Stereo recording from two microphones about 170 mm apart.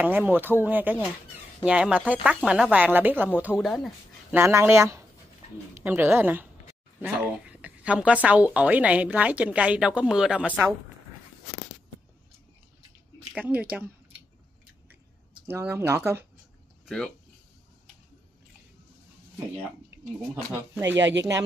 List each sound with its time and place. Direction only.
0.0 s a woman's voice: 10° right (ahead or behind)
4.4 s a woman's voice: 15° right (ahead or behind)
13.3 s a woman's voice: 5° right (ahead or behind)
15.4 s a woman's voice: 15° right (ahead or behind)
16.8 s speech: 5° left (ahead or behind)
21.0 s speech: 90° right